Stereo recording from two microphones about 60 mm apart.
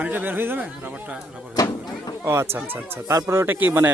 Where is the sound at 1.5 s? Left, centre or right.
Left.